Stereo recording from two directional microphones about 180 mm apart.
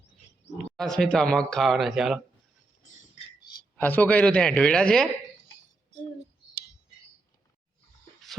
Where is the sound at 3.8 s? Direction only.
10° left (ahead or behind).